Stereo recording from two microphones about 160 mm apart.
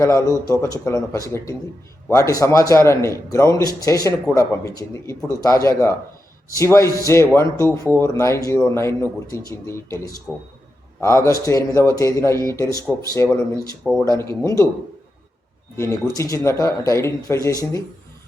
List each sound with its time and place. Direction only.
0.0 s a man's voice: 20° left (ahead or behind)
11.0 s a man's voice: 15° left (ahead or behind)
15.7 s a man's voice: 20° left (ahead or behind)